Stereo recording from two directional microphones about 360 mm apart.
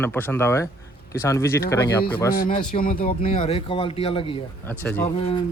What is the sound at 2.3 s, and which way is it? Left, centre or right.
Speech, left.